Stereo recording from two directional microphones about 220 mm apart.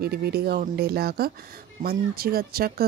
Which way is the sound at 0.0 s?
45° right (ahead or behind).